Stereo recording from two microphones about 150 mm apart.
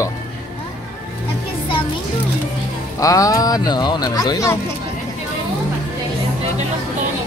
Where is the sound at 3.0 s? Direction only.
20° left (ahead or behind).